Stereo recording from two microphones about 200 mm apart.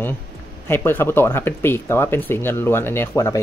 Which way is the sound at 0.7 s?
10° left (ahead or behind).